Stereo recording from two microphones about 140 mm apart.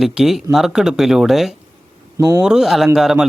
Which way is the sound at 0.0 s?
5° right (ahead or behind).